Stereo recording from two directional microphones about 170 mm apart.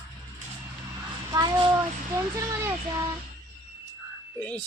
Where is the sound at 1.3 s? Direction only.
25° right (ahead or behind).